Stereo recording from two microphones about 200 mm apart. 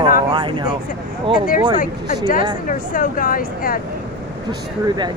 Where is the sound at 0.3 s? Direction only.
25° right (ahead or behind).